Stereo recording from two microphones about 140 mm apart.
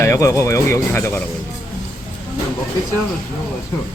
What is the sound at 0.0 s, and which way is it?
Speech, 20° left (ahead or behind).